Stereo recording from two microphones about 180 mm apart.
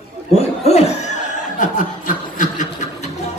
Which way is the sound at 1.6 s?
45° left (ahead or behind).